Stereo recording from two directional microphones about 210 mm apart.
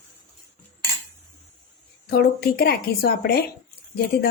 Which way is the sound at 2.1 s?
45° left (ahead or behind).